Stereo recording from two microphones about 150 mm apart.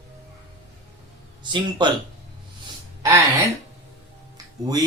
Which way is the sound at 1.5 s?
30° right (ahead or behind).